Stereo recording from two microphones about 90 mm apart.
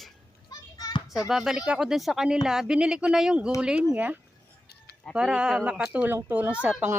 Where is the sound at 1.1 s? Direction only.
5° right (ahead or behind).